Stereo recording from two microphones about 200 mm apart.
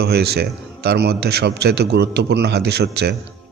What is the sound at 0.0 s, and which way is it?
A man's voice, 55° right (ahead or behind).